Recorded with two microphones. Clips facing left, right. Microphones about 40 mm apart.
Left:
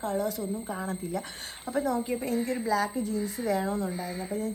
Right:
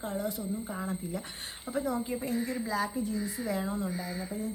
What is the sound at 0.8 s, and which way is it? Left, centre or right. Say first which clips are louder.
Speech: left 3 dB; left.